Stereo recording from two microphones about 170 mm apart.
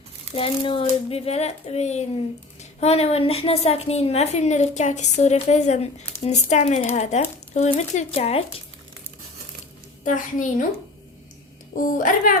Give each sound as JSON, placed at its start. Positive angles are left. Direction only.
{"t": 0.3, "sound": "a woman's voice", "side_deg": 30}
{"t": 10.0, "sound": "a woman's voice", "side_deg": 50}
{"t": 11.8, "sound": "a woman's voice", "side_deg": 50}